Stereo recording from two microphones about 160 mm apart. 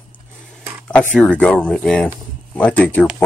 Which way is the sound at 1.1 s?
10° left (ahead or behind).